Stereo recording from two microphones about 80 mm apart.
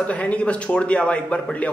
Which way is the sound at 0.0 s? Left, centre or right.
Centre.